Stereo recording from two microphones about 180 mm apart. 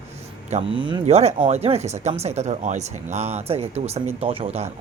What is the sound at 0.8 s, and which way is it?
Speech, 25° right (ahead or behind).